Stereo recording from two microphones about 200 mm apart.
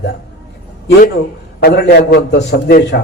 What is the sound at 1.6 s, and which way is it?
A man's voice, 55° left (ahead or behind).